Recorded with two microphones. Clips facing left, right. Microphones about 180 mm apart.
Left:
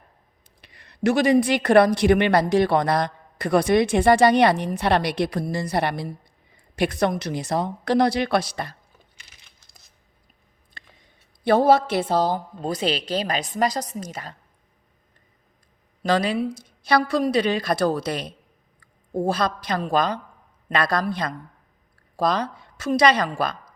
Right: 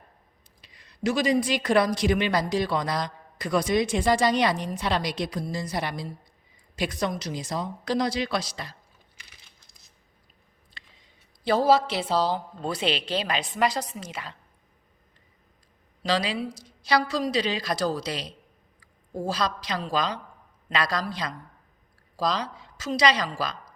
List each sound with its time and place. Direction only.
0.6 s speech: 60° left (ahead or behind)
10.8 s a sound: 55° left (ahead or behind)
11.4 s a woman's voice: 55° left (ahead or behind)
16.0 s a woman's voice: 55° left (ahead or behind)